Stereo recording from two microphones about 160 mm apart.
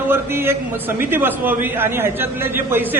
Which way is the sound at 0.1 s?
15° right (ahead or behind).